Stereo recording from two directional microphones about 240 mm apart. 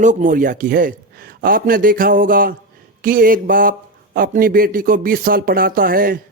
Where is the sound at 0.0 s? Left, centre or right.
Right.